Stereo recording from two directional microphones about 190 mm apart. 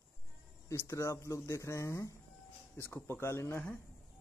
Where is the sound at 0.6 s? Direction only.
15° left (ahead or behind).